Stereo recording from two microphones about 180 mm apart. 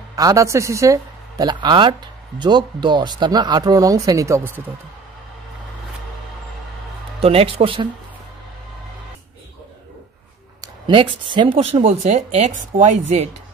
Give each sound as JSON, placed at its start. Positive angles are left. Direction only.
{"t": 0.1, "sound": "speech", "side_deg": -20}
{"t": 7.2, "sound": "speech", "side_deg": -35}
{"t": 10.6, "sound": "speech", "side_deg": -25}